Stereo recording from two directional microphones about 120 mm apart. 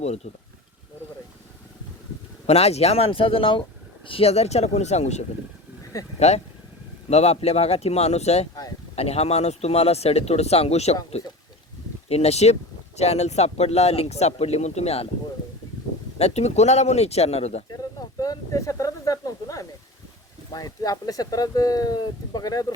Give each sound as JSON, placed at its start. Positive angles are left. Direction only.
{"t": 2.5, "sound": "speech", "side_deg": 60}
{"t": 16.1, "sound": "speech", "side_deg": 65}
{"t": 17.7, "sound": "snake", "side_deg": 30}
{"t": 20.5, "sound": "speech", "side_deg": 30}